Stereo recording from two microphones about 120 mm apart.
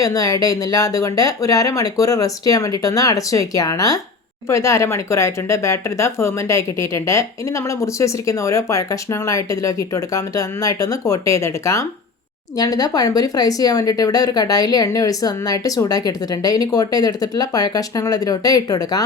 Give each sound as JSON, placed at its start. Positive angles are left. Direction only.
{"t": 0.0, "sound": "speech", "side_deg": 30}